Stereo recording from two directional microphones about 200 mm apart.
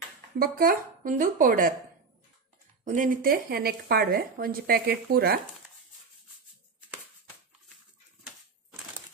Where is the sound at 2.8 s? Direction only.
40° right (ahead or behind).